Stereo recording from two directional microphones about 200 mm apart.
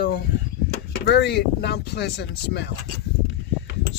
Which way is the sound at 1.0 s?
60° left (ahead or behind).